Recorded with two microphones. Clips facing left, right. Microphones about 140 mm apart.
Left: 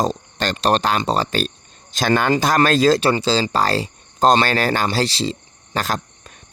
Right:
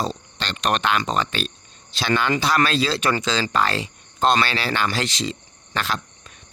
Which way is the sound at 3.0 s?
30° left (ahead or behind).